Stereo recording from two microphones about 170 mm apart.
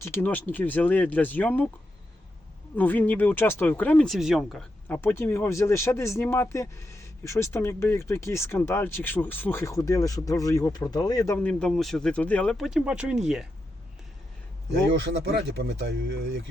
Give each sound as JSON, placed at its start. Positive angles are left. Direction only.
{"t": 0.0, "sound": "speech", "side_deg": 15}
{"t": 2.7, "sound": "speech", "side_deg": 10}
{"t": 4.9, "sound": "speech", "side_deg": 15}
{"t": 11.3, "sound": "speech", "side_deg": 10}
{"t": 14.9, "sound": "speech", "side_deg": -85}